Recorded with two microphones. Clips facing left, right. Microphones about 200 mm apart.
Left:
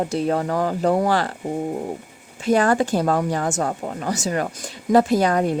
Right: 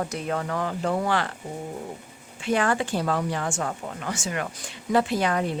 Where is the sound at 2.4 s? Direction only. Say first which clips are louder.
Left 6 dB; 40° left (ahead or behind).